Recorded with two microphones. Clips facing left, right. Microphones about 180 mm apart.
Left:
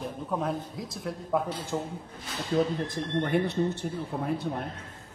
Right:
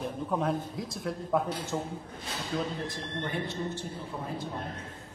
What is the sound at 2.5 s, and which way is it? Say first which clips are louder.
Speech: left 7 dB; 40° left (ahead or behind).